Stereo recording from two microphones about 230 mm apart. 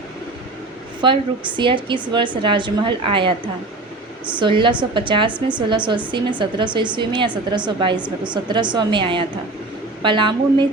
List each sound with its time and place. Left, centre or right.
1.0 s a woman's voice: right
4.4 s a woman's voice: right